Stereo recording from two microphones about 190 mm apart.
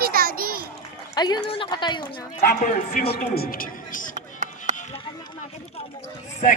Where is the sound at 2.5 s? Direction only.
45° left (ahead or behind).